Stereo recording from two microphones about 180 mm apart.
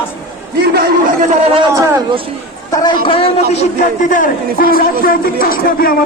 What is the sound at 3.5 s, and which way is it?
A man's voice, 45° left (ahead or behind).